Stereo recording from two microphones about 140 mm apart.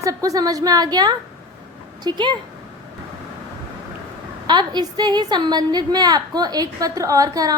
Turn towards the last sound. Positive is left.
turn(degrees=-25)  # may be behind; listen again after turning